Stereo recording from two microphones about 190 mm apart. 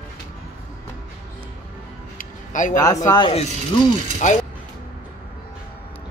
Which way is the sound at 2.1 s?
40° left (ahead or behind).